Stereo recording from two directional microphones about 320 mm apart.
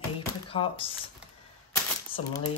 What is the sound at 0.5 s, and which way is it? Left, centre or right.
Speech, centre.